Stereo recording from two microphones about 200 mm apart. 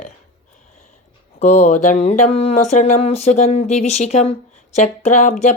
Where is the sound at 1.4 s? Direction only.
35° left (ahead or behind).